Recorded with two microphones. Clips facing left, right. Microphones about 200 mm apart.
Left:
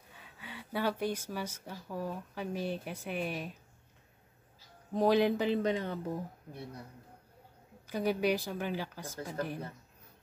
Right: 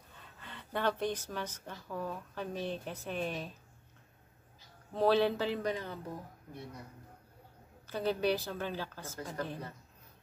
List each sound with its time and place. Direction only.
0.1 s speech: 10° left (ahead or behind)
4.9 s a woman's voice: 15° left (ahead or behind)
7.8 s a woman's voice: 10° left (ahead or behind)